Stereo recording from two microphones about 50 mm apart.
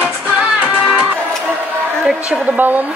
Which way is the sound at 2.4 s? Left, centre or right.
Right.